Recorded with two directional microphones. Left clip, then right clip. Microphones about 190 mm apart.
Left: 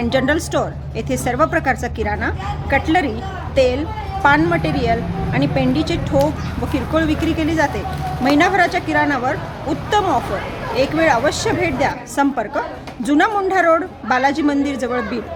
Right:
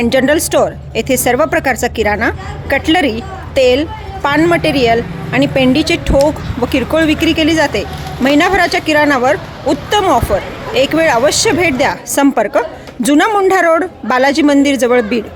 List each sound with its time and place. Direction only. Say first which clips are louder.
0.0 s a woman's voice: right 6 dB; 45° right (ahead or behind)